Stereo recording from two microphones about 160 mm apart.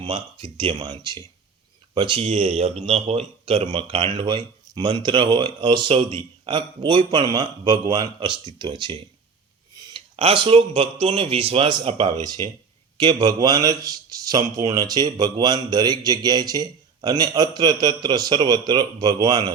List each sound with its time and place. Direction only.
0.0 s a man's voice: 35° right (ahead or behind)
12.2 s a man's voice: 25° right (ahead or behind)